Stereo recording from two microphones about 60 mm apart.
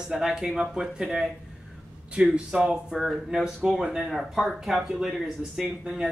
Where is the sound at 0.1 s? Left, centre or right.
Centre.